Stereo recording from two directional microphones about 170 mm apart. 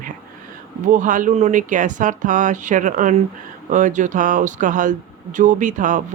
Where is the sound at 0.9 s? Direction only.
50° right (ahead or behind).